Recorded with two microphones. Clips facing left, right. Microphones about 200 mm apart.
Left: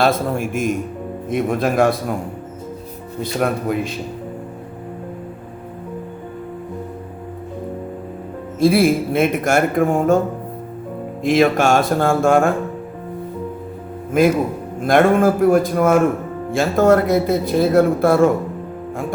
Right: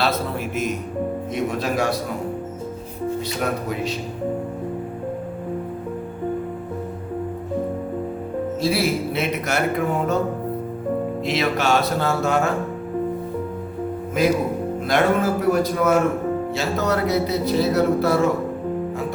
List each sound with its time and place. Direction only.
0.0 s speech: 50° left (ahead or behind)
3.2 s speech: 55° left (ahead or behind)
8.6 s speech: 50° left (ahead or behind)
11.2 s speech: 50° left (ahead or behind)
14.2 s speech: 50° left (ahead or behind)